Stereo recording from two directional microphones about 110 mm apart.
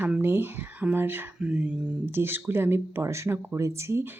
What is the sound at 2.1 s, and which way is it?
A woman's voice, 20° right (ahead or behind).